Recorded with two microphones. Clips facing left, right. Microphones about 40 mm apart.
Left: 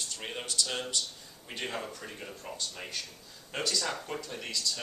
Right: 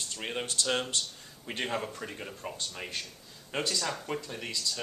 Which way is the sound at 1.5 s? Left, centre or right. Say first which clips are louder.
Right 3 dB; right.